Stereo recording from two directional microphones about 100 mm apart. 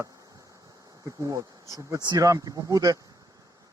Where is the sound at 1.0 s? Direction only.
35° right (ahead or behind).